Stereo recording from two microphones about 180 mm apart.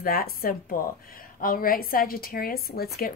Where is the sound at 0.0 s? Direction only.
55° left (ahead or behind).